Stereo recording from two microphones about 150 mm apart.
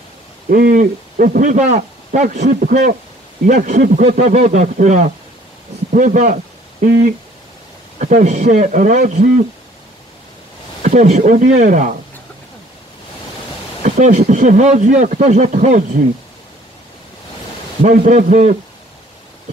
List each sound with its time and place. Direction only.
0.5 s a man's voice: 70° right (ahead or behind)
4.2 s a man's voice: 50° right (ahead or behind); by 7.1 s 65° right (ahead or behind)
8.0 s a man's voice: 50° right (ahead or behind)
10.8 s a man's voice: 50° right (ahead or behind)
13.8 s speech: 50° right (ahead or behind)
18.0 s speech: 50° right (ahead or behind)